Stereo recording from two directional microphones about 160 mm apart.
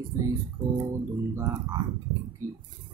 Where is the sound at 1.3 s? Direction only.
20° right (ahead or behind).